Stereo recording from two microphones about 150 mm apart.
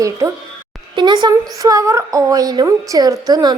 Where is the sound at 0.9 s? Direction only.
30° right (ahead or behind).